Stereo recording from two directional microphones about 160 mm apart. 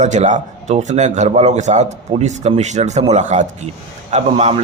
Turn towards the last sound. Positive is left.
turn(degrees=-40)  # may be behind; listen again after turning